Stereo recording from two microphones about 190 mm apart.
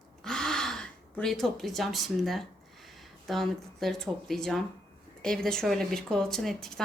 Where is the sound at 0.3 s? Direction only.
5° left (ahead or behind).